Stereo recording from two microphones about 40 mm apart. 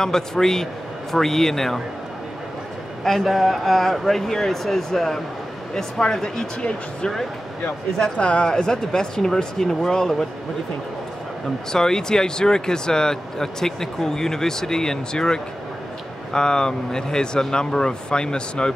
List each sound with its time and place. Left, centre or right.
0.0 s speech: centre
3.0 s speech: centre; by 7.1 s left
8.2 s speech: left
11.7 s speech: centre